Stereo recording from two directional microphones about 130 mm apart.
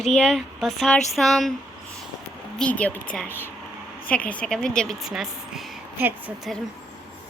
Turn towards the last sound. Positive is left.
turn(degrees=-15)  # may be behind; listen again after turning